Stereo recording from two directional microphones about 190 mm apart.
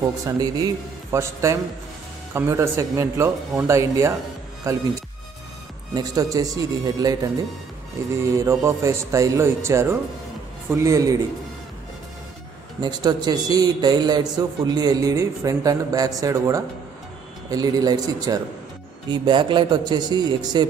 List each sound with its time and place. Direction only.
0.0 s a man's voice: 20° right (ahead or behind)
5.9 s a man's voice: 20° right (ahead or behind)
8.4 s speech: 15° right (ahead or behind)
12.8 s a man's voice: 20° right (ahead or behind)